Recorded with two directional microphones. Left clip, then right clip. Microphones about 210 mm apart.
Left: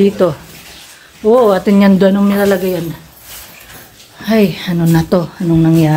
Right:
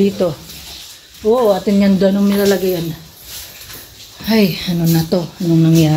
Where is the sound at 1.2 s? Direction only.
35° left (ahead or behind).